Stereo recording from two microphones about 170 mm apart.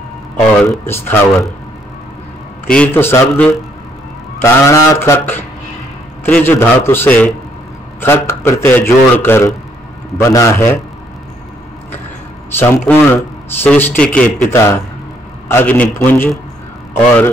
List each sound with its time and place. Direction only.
0.6 s a man's voice: 15° left (ahead or behind)
2.6 s a man's voice: 10° left (ahead or behind)
12.4 s a man's voice: 10° left (ahead or behind)